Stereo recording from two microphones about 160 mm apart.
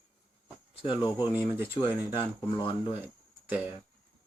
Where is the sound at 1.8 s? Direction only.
35° left (ahead or behind).